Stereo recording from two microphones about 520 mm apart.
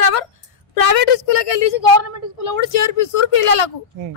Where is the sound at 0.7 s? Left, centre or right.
Left.